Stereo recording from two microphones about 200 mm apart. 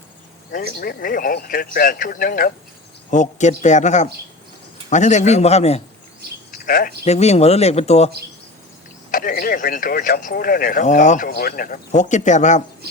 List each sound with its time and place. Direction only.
0.5 s speech: 45° left (ahead or behind); by 5.8 s 30° left (ahead or behind)
6.5 s a sound: 45° left (ahead or behind)
7.0 s speech: 35° left (ahead or behind)
9.1 s speech: 45° left (ahead or behind)